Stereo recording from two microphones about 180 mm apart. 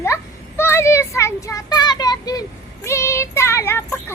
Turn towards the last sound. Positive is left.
turn(degrees=15)  # may be behind; listen again after turning